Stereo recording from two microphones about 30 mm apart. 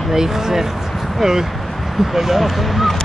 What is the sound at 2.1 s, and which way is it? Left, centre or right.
Speech, centre.